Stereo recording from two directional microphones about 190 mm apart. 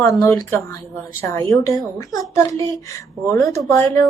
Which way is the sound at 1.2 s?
15° left (ahead or behind).